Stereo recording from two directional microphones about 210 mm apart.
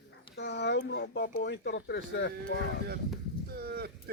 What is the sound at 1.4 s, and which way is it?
Speech, 55° left (ahead or behind).